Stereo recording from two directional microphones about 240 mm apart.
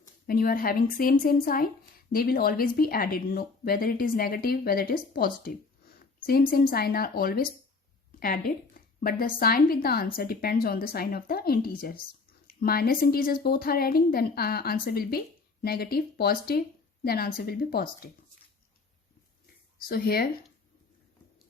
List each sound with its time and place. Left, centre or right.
0.3 s speech: left
19.9 s speech: left